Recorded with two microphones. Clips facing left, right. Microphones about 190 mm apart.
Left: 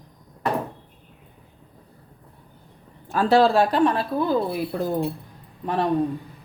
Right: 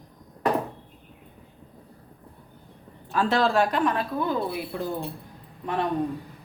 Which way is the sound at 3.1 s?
35° left (ahead or behind).